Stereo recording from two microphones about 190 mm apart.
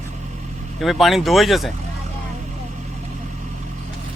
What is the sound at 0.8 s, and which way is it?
Speech, centre (ahead or behind).